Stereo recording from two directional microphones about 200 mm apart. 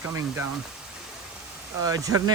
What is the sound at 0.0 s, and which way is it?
Speech, 10° right (ahead or behind).